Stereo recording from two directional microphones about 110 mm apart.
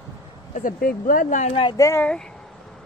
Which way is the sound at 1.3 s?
90° left.